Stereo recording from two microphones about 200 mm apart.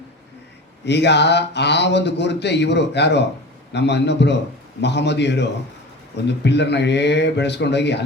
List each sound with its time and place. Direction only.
0.9 s speech: 60° left (ahead or behind)